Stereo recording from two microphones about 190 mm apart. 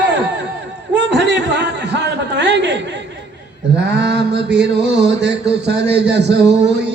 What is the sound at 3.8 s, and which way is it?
Mantra, 65° right (ahead or behind).